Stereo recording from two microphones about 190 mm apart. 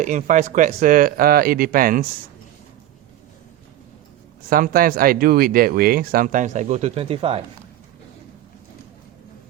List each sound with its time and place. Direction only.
0.0 s speech: 40° right (ahead or behind)
4.4 s speech: 50° right (ahead or behind); by 7.4 s 30° right (ahead or behind)